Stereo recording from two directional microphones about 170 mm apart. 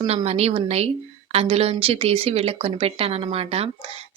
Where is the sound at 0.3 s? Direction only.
35° right (ahead or behind).